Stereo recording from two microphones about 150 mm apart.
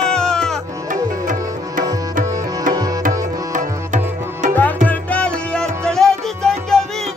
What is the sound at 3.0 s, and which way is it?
Tabla, 60° right (ahead or behind).